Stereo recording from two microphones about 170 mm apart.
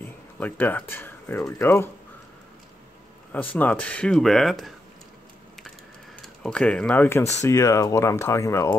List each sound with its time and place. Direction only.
0.0 s speech: 10° left (ahead or behind)
3.3 s speech: 10° left (ahead or behind)
6.2 s speech: 5° left (ahead or behind)